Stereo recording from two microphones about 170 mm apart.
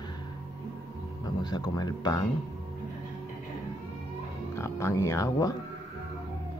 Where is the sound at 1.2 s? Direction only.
25° left (ahead or behind).